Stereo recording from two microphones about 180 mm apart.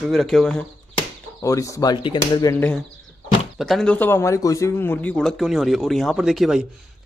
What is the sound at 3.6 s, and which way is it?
A man's voice, centre (ahead or behind).